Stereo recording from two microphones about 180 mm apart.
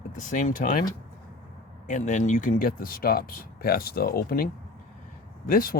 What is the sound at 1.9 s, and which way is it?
Speech, 45° left (ahead or behind).